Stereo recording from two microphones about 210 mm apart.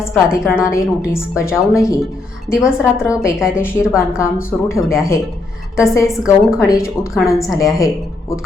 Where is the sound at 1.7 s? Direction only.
15° left (ahead or behind).